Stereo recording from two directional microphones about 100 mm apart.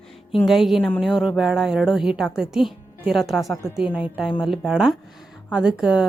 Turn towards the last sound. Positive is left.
turn(degrees=-5)  # may be behind; listen again after turning